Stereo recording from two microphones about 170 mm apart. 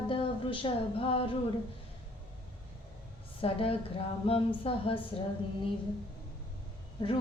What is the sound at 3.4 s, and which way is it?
A woman's voice, 30° left (ahead or behind).